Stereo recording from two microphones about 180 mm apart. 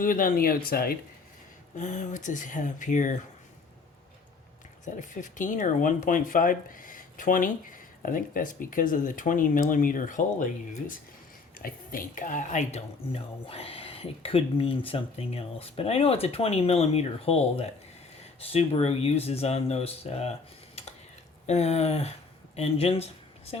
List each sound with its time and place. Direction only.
0.0 s speech: 50° left (ahead or behind)
1.7 s speech: 45° left (ahead or behind)
4.9 s a woman's voice: 45° left (ahead or behind)
21.4 s a woman's voice: 40° left (ahead or behind)